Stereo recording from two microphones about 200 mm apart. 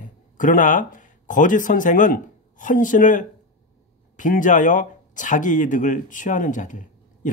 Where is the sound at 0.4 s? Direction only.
40° left (ahead or behind).